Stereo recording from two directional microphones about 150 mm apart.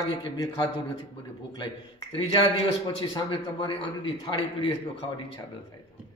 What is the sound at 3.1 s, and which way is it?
A man's voice, 30° left (ahead or behind).